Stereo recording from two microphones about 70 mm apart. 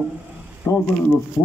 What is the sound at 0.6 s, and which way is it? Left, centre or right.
Speech, left.